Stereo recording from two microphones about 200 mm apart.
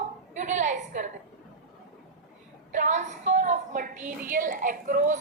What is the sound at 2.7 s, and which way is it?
A woman's voice, 35° right (ahead or behind).